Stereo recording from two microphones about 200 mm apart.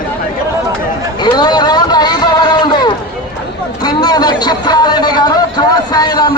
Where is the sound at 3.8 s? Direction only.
20° left (ahead or behind).